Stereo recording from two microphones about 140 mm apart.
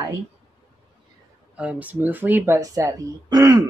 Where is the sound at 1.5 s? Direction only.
10° right (ahead or behind).